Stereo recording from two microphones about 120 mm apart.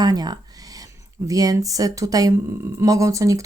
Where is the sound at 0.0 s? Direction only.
35° right (ahead or behind).